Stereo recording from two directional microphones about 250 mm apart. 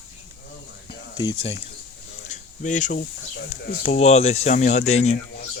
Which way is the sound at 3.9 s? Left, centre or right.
Left.